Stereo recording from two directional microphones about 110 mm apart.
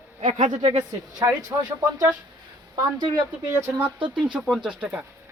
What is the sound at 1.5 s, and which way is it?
Speech, 30° right (ahead or behind).